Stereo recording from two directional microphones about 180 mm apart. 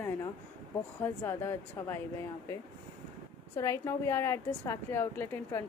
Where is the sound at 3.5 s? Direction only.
20° left (ahead or behind).